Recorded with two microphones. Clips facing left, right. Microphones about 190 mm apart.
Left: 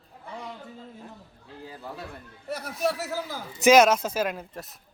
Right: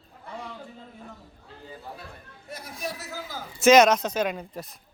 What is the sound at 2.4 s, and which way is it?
Speech, 65° left (ahead or behind).